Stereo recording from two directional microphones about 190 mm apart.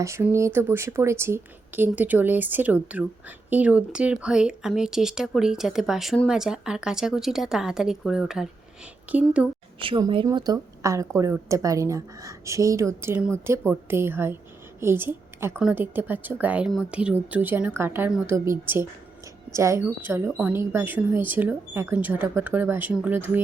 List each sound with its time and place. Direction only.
0.0 s speech: 15° right (ahead or behind)
9.8 s a woman's voice: 25° right (ahead or behind); by 23.4 s 10° right (ahead or behind)